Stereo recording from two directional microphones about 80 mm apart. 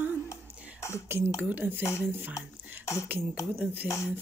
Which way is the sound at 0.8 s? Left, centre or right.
Left.